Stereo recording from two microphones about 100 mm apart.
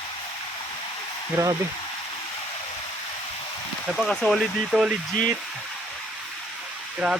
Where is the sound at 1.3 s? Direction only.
35° right (ahead or behind).